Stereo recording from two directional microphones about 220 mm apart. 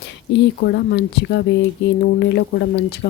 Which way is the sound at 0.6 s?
55° left (ahead or behind).